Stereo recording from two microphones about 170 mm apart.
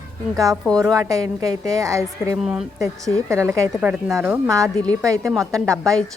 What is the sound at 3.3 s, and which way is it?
Speech, 15° right (ahead or behind).